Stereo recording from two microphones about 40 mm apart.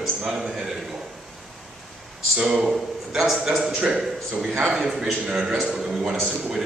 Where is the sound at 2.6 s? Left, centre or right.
Centre.